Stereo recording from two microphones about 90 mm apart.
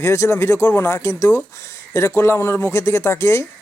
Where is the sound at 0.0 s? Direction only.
30° left (ahead or behind).